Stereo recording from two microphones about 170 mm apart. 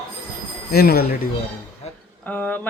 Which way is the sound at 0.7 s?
65° left (ahead or behind).